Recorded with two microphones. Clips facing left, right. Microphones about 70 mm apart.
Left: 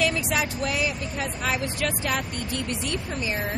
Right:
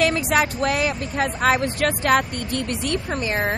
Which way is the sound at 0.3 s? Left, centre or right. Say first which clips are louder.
Right 6 dB; right.